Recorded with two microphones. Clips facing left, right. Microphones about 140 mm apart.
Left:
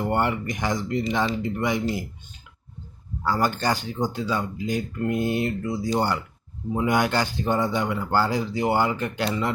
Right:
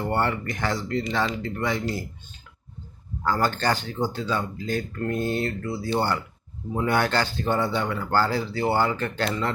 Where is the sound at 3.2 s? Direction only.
10° left (ahead or behind).